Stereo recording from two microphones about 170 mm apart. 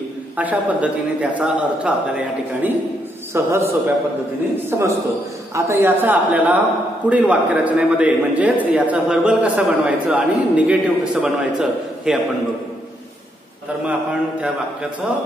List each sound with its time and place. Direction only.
0.4 s a man's voice: 10° right (ahead or behind)